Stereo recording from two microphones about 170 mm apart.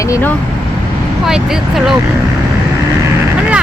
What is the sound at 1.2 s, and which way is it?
Speech, 5° right (ahead or behind).